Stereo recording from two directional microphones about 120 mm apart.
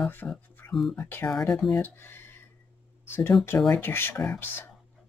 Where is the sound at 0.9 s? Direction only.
20° left (ahead or behind).